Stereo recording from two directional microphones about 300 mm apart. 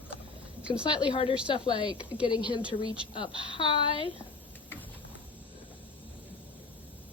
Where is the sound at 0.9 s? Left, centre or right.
Centre.